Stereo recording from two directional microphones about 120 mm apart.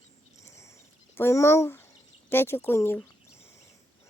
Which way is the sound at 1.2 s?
20° left (ahead or behind).